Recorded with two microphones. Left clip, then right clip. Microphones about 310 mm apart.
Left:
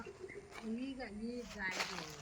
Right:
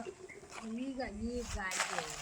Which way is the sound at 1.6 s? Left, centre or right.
Centre.